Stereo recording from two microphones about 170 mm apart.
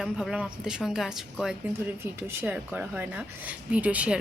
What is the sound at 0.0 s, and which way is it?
A woman's voice, centre (ahead or behind).